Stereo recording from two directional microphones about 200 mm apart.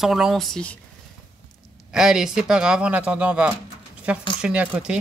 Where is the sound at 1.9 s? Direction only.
5° right (ahead or behind).